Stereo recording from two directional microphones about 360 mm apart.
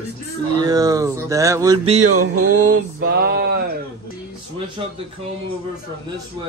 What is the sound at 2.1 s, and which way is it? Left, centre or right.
Music, right.